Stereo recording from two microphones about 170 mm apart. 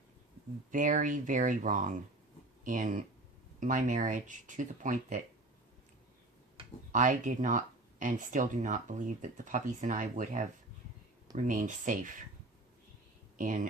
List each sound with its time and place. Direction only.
0.7 s speech: 50° right (ahead or behind)
6.9 s speech: 50° right (ahead or behind)